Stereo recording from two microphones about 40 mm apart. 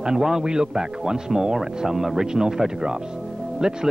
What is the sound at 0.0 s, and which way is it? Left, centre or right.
A man's voice, centre.